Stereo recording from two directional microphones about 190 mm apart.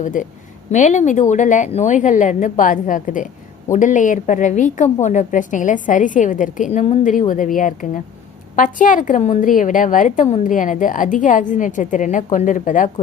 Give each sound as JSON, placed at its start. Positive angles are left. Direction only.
{"t": 0.0, "sound": "a woman's voice", "side_deg": 45}